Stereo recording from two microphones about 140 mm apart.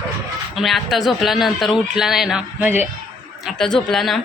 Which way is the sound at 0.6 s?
Centre (ahead or behind).